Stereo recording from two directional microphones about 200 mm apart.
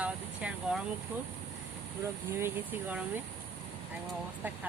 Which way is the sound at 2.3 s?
10° right (ahead or behind).